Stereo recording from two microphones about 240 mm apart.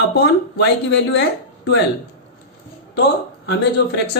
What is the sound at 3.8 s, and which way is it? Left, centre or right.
Speech, left.